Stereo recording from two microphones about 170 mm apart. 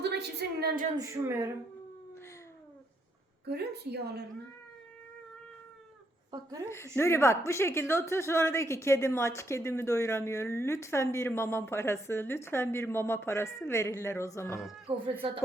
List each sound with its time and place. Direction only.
0.0 s a sound: 80° right
0.9 s speech: 20° right (ahead or behind)
3.4 s a woman's voice: 75° right (ahead or behind)
6.3 s a woman's voice: 20° right (ahead or behind)
6.9 s a woman's voice: 15° left (ahead or behind)
14.8 s speech: 35° right (ahead or behind)